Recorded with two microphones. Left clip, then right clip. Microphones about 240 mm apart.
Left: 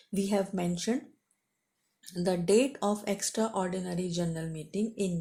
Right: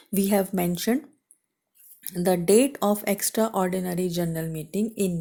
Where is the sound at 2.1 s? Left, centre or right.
Right.